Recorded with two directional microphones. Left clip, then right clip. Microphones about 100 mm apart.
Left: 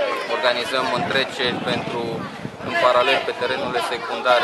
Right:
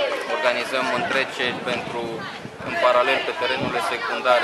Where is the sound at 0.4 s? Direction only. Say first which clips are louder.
Left 1 dB; 5° left (ahead or behind).